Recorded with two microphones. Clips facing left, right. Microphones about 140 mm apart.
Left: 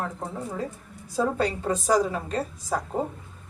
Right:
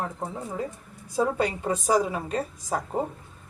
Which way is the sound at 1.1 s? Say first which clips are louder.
Even; 10° right (ahead or behind).